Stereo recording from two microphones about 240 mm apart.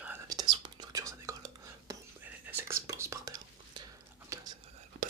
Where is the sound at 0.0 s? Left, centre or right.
Centre.